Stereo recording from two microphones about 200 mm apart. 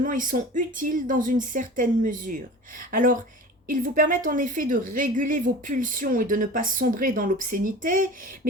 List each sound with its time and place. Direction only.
0.0 s a woman's voice: 40° right (ahead or behind)